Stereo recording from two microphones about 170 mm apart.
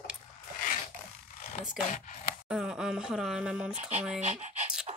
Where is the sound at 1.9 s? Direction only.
50° left (ahead or behind).